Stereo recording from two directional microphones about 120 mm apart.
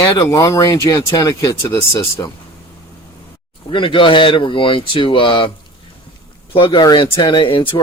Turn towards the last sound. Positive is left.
turn(degrees=45)  # may be behind; listen again after turning